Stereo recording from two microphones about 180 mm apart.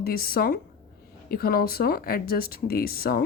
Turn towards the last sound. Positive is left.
turn(degrees=55)  # may be behind; listen again after turning